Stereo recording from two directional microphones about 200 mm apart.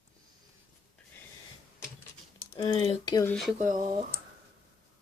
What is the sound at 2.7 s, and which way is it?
Speech, 25° left (ahead or behind).